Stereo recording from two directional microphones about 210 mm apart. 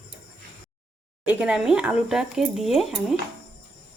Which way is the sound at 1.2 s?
5° right (ahead or behind).